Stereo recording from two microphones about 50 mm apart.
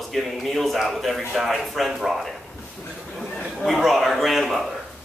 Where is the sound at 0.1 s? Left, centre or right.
Centre.